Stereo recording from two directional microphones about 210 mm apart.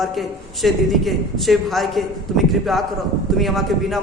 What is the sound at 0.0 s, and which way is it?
A man's voice, centre (ahead or behind).